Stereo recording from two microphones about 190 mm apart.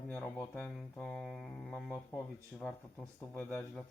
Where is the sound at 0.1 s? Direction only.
10° left (ahead or behind).